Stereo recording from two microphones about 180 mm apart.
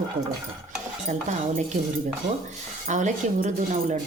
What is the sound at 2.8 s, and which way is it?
Speech, 40° right (ahead or behind).